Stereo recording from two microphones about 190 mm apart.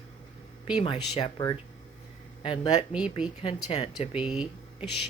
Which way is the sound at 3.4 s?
30° left (ahead or behind).